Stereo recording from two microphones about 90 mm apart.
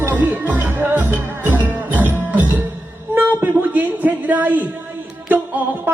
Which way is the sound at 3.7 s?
20° right (ahead or behind).